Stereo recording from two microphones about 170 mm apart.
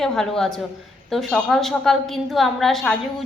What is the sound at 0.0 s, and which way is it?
A woman's voice, 5° left (ahead or behind).